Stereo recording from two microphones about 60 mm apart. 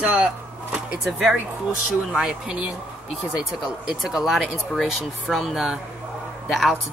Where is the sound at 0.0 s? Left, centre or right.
Centre.